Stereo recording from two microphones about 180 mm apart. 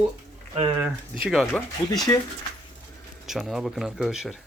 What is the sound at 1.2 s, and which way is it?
A man's voice, centre (ahead or behind).